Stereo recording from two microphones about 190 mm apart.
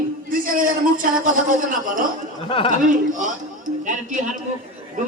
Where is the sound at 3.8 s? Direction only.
40° right (ahead or behind).